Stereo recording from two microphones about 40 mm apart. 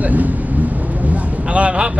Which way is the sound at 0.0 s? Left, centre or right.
Right.